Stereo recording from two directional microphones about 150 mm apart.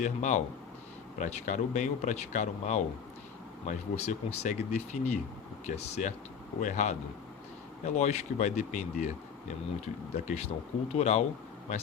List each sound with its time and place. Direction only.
0.0 s speech: 50° left (ahead or behind)